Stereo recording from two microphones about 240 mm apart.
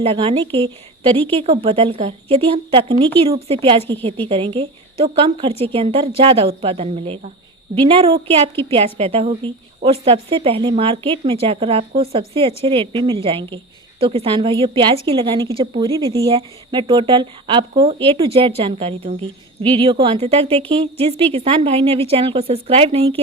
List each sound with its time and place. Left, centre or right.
0.0 s speech: right
1.1 s a woman's voice: centre
1.5 s speech: right